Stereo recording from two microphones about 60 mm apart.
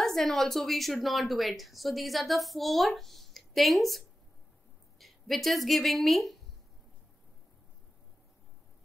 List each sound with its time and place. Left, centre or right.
0.0 s a woman's voice: centre